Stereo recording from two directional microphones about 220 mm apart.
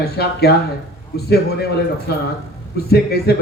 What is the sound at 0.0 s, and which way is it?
A man's voice, 45° left (ahead or behind).